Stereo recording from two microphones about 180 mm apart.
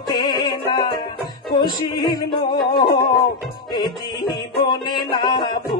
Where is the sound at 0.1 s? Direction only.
25° left (ahead or behind).